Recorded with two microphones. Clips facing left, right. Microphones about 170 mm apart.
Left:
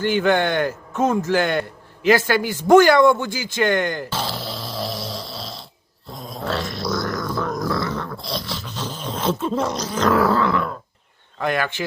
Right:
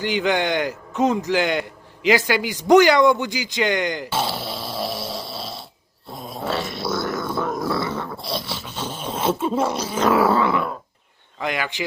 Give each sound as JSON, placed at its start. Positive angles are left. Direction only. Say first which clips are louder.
{"t": 0.0, "sound": "a man's voice", "louder": "left 3 dB", "side_deg": -15}
{"t": 5.0, "sound": "snoring", "louder": "right 1 dB", "side_deg": -25}
{"t": 5.3, "sound": "snoring", "louder": "right 1 dB", "side_deg": -5}
{"t": 6.1, "sound": "dog", "louder": "even", "side_deg": -5}
{"t": 7.7, "sound": "speech", "louder": "even", "side_deg": -5}
{"t": 11.3, "sound": "a man's voice", "louder": "left 3 dB", "side_deg": -15}